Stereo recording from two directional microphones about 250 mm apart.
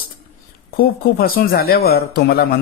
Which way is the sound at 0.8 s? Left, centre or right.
Left.